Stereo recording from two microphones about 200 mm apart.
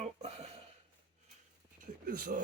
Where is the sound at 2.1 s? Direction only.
40° right (ahead or behind).